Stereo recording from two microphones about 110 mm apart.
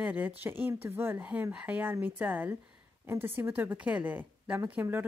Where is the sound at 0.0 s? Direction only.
15° right (ahead or behind).